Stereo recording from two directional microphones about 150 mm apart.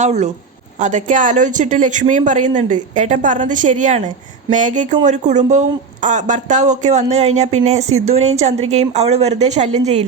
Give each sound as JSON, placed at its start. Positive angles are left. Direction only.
{"t": 0.0, "sound": "speech", "side_deg": -45}